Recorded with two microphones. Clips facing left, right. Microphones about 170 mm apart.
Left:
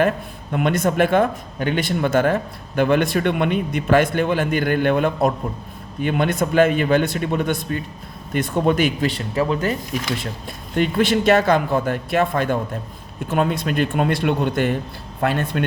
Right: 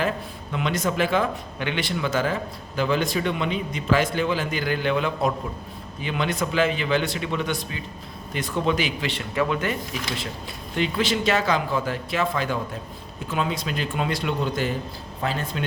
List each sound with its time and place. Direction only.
0.5 s a man's voice: 55° left (ahead or behind); by 9.7 s 35° left (ahead or behind)
10.8 s a man's voice: 50° left (ahead or behind)